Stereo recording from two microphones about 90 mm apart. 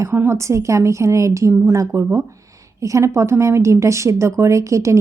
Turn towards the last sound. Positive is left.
turn(degrees=-35)  # may be behind; listen again after turning